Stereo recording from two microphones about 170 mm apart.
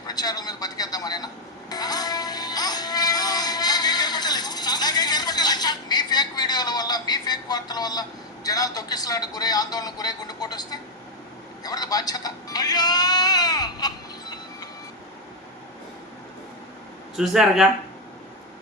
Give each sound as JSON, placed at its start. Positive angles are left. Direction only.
{"t": 0.1, "sound": "a man's voice", "side_deg": 25}
{"t": 1.7, "sound": "music", "side_deg": 25}
{"t": 8.4, "sound": "a man's voice", "side_deg": 20}
{"t": 11.6, "sound": "a sound", "side_deg": 20}
{"t": 17.2, "sound": "speech", "side_deg": 0}